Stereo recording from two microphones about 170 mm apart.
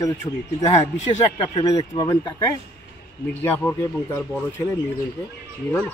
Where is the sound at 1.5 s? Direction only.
20° left (ahead or behind).